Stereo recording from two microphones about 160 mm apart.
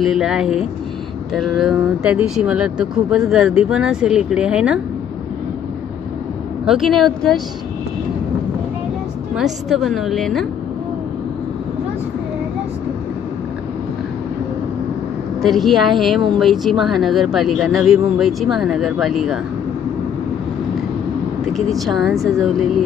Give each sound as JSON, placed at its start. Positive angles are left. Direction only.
{"t": 0.0, "sound": "speech", "side_deg": 0}
{"t": 6.6, "sound": "speech", "side_deg": 0}
{"t": 9.3, "sound": "speech", "side_deg": 0}
{"t": 15.4, "sound": "speech", "side_deg": 0}
{"t": 21.7, "sound": "speech", "side_deg": 0}